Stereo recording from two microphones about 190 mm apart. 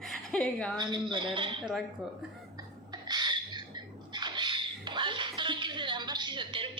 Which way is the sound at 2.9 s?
20° right (ahead or behind).